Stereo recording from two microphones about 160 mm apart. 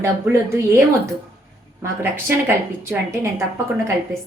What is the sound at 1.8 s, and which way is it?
A woman's voice, 15° right (ahead or behind).